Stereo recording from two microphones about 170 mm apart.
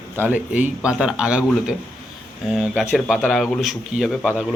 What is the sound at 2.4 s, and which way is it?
Speech, 5° right (ahead or behind).